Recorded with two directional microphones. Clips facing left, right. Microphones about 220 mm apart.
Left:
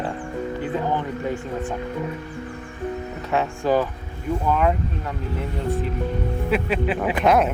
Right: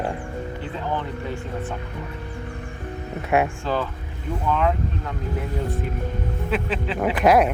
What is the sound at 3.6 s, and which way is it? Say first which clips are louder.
Speech: left 5 dB; 15° left (ahead or behind).